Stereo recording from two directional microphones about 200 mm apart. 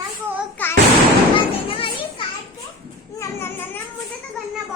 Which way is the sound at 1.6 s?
25° left (ahead or behind).